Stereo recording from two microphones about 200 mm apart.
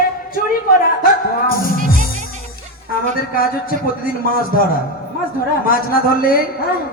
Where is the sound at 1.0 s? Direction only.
45° left (ahead or behind).